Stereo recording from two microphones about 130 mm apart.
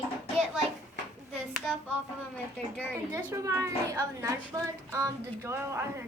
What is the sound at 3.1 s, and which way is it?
A woman's voice, 25° right (ahead or behind).